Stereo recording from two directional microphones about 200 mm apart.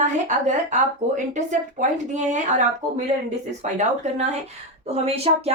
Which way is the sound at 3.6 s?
35° right (ahead or behind).